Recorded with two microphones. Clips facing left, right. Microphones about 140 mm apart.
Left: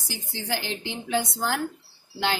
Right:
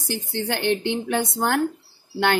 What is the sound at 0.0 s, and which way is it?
Speech, 60° right (ahead or behind).